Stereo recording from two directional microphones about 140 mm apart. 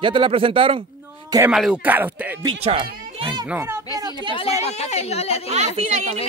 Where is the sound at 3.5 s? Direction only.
20° right (ahead or behind).